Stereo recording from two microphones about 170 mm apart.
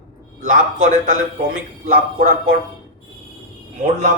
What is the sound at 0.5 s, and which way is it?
A man's voice, 55° right (ahead or behind).